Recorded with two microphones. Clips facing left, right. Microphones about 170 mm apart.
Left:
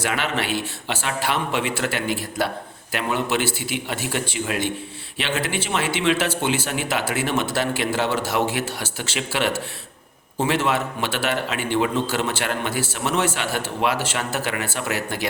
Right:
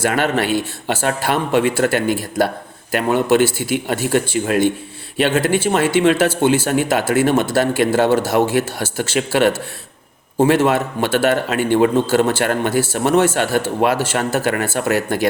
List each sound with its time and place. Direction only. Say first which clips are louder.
0.0 s speech: right 7 dB; 45° right (ahead or behind)